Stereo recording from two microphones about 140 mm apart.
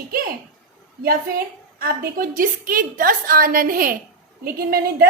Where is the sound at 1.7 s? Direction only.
90° right.